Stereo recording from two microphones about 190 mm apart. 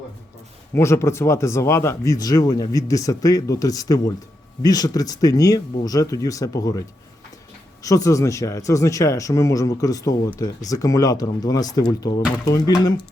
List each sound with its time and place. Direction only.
0.7 s speech: 15° left (ahead or behind)